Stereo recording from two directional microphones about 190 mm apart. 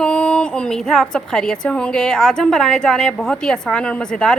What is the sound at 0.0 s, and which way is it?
A woman's voice, 5° left (ahead or behind).